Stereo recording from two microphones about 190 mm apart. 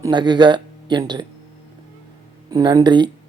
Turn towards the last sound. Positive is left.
turn(degrees=-25)  # may be behind; listen again after turning